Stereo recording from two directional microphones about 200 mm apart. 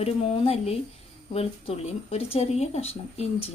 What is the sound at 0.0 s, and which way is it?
Speech, 30° left (ahead or behind).